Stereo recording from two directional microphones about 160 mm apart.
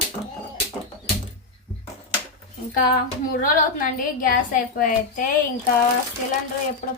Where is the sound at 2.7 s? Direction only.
65° left (ahead or behind).